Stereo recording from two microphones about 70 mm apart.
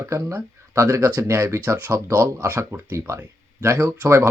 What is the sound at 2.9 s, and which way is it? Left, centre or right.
Speech, right.